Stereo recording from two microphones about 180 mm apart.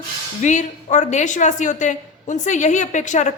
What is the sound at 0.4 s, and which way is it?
A woman's voice, 40° left (ahead or behind).